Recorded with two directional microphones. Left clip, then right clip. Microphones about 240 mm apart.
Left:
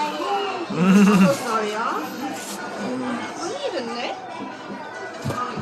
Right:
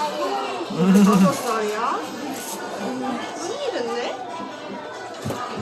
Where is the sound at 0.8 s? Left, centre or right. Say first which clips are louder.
Even; centre.